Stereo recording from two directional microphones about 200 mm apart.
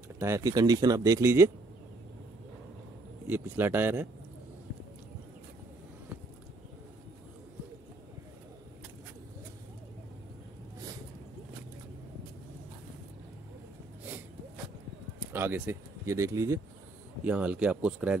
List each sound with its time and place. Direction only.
0.2 s speech: 15° right (ahead or behind)
3.3 s speech: 10° right (ahead or behind)
15.3 s speech: 10° right (ahead or behind)